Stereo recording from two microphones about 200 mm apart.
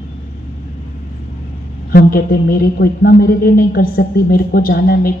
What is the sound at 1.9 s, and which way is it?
Speech, 50° left (ahead or behind).